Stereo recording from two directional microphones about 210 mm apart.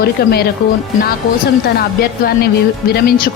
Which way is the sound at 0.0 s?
50° left (ahead or behind).